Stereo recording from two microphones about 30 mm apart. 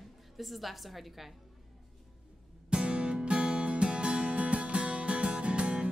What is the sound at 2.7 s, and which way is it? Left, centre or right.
Music, right.